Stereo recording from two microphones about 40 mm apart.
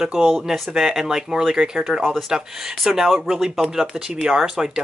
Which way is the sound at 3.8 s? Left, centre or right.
Right.